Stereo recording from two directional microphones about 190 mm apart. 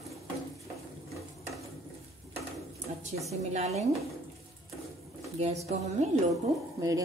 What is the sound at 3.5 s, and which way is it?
Speech, 35° right (ahead or behind).